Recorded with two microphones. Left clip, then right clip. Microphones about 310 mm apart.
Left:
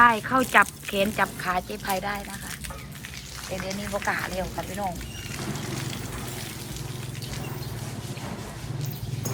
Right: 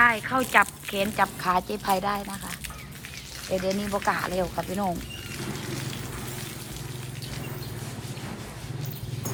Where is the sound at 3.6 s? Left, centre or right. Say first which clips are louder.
Right 1 dB; centre.